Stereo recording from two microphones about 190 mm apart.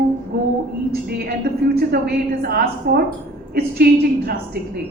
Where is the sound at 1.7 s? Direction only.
55° right (ahead or behind).